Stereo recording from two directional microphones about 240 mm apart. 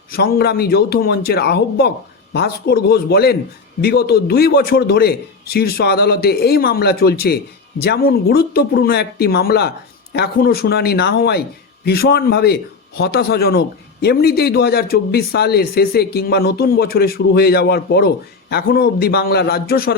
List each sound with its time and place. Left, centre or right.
0.1 s a man's voice: left